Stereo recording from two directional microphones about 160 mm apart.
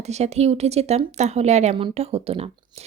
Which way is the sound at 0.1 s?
45° right (ahead or behind).